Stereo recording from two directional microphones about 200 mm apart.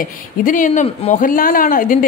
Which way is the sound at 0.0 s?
40° left (ahead or behind).